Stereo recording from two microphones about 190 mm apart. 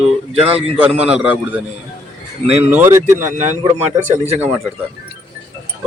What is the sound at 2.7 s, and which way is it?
Speech, 10° right (ahead or behind).